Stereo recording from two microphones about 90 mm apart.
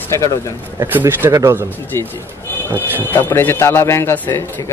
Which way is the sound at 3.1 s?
25° left (ahead or behind).